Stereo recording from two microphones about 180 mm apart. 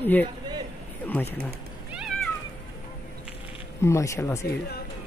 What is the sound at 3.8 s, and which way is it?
Speech, 15° left (ahead or behind).